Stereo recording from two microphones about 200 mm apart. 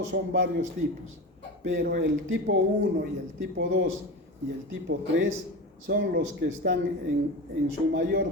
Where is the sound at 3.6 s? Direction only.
70° right (ahead or behind).